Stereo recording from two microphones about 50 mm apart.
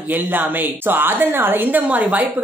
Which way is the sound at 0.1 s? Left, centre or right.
Right.